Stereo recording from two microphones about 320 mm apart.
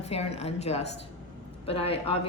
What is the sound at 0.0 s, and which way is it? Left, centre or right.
A woman's voice, centre.